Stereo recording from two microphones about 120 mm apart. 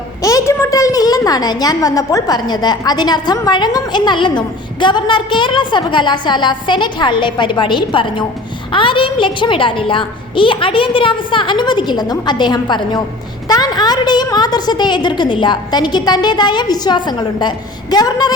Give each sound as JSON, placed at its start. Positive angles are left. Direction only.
{"t": 0.2, "sound": "a woman's voice", "side_deg": 30}